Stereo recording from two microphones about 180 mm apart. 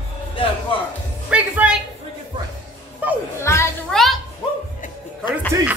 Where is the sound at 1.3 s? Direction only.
5° right (ahead or behind).